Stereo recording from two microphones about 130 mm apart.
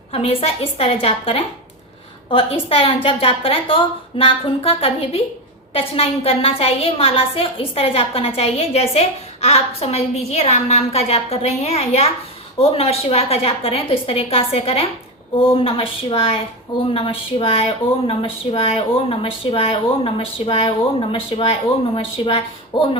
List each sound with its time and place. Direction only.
0.1 s a woman's voice: 50° left (ahead or behind)